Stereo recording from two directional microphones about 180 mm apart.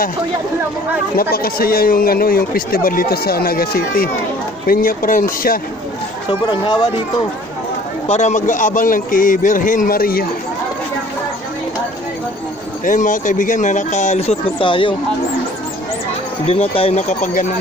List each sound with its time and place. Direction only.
1.1 s a man's voice: 55° left (ahead or behind)
6.4 s speech: 25° left (ahead or behind)
8.0 s a man's voice: 40° left (ahead or behind)
12.8 s a man's voice: 45° left (ahead or behind); by 14.9 s 30° left (ahead or behind)
16.5 s speech: 30° left (ahead or behind)